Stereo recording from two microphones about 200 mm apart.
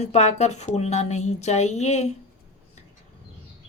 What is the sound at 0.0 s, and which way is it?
A woman's voice, 35° left (ahead or behind).